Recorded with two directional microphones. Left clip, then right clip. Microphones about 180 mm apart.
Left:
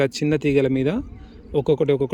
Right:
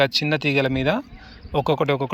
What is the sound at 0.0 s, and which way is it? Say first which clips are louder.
Speech: right 1 dB; 20° left (ahead or behind).